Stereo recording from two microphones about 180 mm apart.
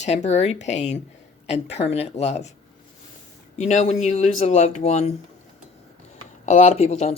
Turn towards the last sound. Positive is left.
turn(degrees=35)  # may be behind; listen again after turning